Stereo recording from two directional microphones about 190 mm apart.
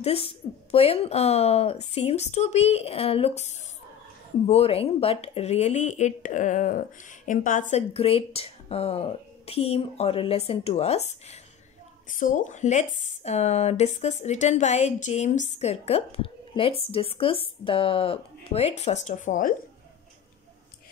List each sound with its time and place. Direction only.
0.0 s speech: 30° left (ahead or behind)